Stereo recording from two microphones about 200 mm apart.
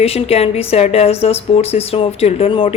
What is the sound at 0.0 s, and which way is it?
Speech, 30° left (ahead or behind).